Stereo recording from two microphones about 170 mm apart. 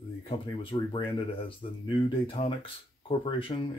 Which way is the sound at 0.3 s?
30° left (ahead or behind).